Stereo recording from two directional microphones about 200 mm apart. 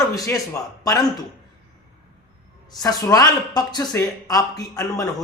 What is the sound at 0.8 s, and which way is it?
Speech, 20° left (ahead or behind).